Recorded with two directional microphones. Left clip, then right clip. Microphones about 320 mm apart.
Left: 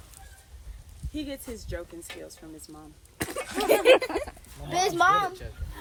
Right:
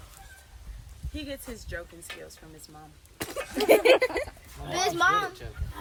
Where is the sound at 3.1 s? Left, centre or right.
Left.